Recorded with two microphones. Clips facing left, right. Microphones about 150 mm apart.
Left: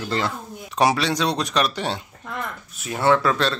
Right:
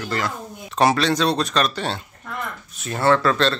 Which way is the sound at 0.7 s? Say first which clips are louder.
Right 2 dB; 10° left (ahead or behind).